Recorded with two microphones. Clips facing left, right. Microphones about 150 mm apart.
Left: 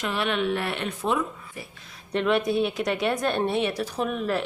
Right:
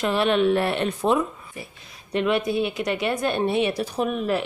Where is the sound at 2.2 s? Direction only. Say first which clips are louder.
Even; 5° right (ahead or behind).